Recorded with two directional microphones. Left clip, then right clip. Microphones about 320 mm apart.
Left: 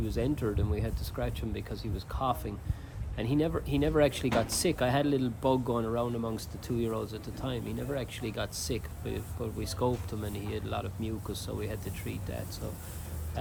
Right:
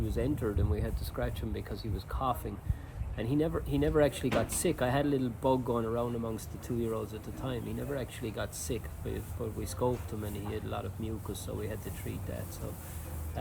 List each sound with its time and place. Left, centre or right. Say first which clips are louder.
0.2 s speech: left 1 dB; centre